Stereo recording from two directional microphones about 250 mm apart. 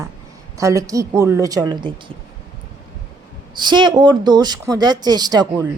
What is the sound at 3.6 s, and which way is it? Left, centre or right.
Speech, centre.